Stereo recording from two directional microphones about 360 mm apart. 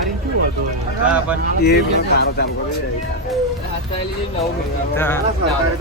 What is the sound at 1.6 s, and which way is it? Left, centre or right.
Speech, left.